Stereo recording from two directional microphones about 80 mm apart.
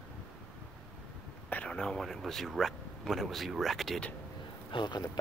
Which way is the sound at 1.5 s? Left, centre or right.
Centre.